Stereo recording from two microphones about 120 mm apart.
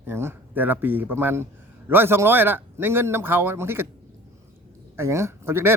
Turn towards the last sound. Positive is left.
turn(degrees=-20)  # may be behind; listen again after turning